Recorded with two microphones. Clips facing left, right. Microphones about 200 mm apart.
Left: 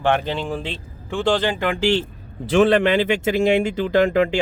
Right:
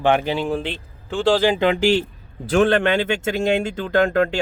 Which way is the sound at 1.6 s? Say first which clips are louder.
Right 4 dB; 20° right (ahead or behind).